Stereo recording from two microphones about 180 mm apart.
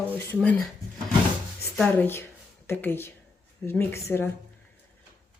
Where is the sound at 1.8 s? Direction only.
10° left (ahead or behind).